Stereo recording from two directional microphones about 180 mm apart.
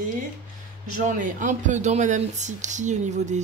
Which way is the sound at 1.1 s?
45° right (ahead or behind).